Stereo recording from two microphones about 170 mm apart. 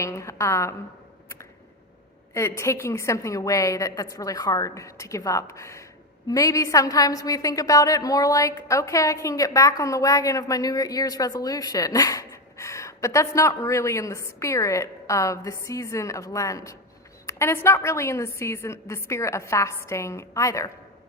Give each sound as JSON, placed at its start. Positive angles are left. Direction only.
{"t": 0.0, "sound": "a woman's voice", "side_deg": 15}
{"t": 2.3, "sound": "a woman's voice", "side_deg": 15}